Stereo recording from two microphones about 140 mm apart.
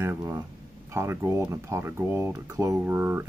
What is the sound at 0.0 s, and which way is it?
Speech, 15° right (ahead or behind).